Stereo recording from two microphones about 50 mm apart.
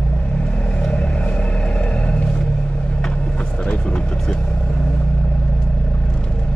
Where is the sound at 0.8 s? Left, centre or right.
Left.